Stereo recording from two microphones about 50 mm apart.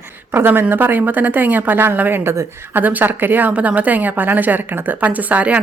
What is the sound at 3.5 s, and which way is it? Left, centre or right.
A woman's voice, right.